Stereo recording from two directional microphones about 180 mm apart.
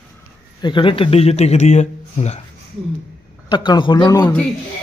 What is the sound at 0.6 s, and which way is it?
Speech, 30° left (ahead or behind).